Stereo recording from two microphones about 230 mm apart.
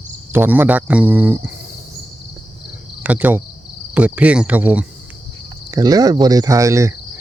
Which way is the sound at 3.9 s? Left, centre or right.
Centre.